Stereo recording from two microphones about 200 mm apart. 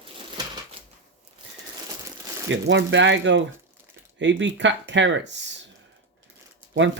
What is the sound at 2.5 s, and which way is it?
Speech, 65° right (ahead or behind).